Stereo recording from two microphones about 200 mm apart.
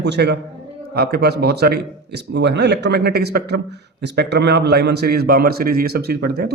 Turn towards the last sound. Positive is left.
turn(degrees=-50)  # may be behind; listen again after turning